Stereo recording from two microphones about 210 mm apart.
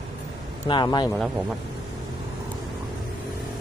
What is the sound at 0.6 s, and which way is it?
Speech, 20° left (ahead or behind).